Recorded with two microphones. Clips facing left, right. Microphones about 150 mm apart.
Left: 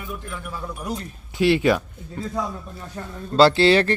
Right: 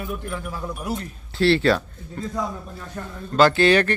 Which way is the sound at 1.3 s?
15° left (ahead or behind).